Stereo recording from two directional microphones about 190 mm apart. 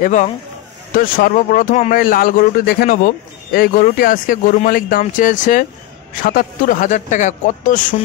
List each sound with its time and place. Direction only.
0.0 s speech: 40° left (ahead or behind)